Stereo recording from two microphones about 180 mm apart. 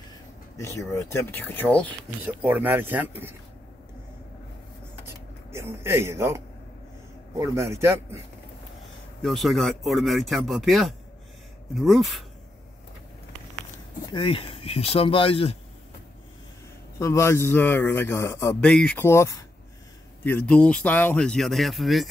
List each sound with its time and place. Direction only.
0.6 s a man's voice: 15° left (ahead or behind)
2.2 s speech: 10° right (ahead or behind)
5.0 s a sound: 15° right (ahead or behind)
7.3 s speech: 15° right (ahead or behind)
9.2 s speech: centre (ahead or behind)
14.1 s speech: 30° left (ahead or behind)
17.0 s a man's voice: 15° left (ahead or behind); by 22.1 s centre (ahead or behind)